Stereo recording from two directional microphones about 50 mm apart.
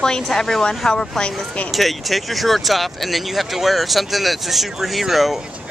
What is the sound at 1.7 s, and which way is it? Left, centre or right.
Speech, centre.